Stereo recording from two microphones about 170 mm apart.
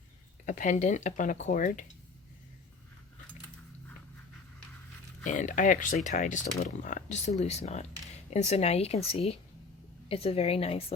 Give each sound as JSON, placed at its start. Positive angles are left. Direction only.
{"t": 0.4, "sound": "speech", "side_deg": 50}
{"t": 5.2, "sound": "speech", "side_deg": 50}